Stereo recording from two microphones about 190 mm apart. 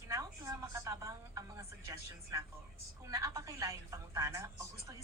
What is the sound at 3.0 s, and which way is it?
A woman's voice, 15° right (ahead or behind).